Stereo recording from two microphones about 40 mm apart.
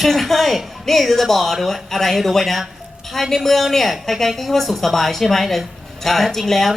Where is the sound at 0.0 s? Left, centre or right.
Centre.